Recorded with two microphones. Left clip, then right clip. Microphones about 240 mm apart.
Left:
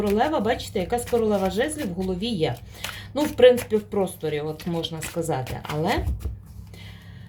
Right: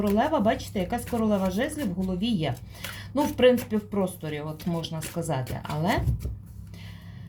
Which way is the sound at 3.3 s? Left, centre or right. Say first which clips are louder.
Left 6 dB; left.